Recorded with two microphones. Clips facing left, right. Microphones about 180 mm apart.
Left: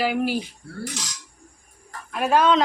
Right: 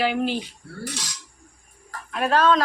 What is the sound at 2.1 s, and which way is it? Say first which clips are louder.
Speech: left 1 dB; 10° left (ahead or behind).